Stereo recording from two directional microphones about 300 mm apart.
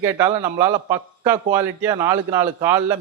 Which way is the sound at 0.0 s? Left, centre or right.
Centre.